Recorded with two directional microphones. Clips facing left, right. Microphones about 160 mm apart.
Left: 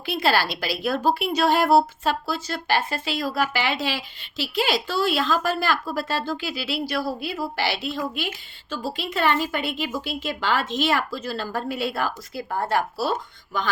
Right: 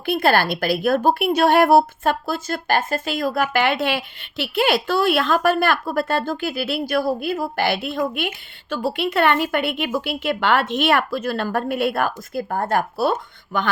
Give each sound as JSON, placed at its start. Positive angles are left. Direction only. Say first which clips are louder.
{"t": 0.0, "sound": "a woman's voice", "louder": "right 4 dB", "side_deg": -55}